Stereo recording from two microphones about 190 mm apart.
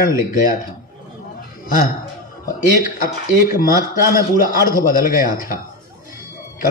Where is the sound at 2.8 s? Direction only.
50° left (ahead or behind).